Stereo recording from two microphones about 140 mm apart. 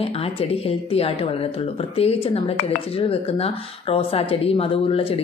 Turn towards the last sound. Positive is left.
turn(degrees=45)  # may be behind; listen again after turning